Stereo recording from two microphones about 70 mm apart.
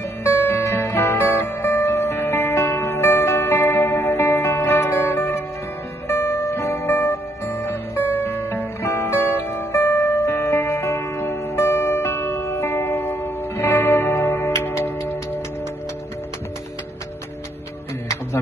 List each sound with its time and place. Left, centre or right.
0.2 s guitar: left
6.0 s music: left